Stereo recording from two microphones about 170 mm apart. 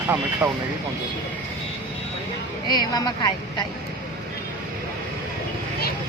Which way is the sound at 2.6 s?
25° left (ahead or behind).